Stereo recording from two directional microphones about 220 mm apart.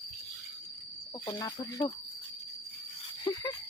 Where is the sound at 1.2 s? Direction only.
15° left (ahead or behind).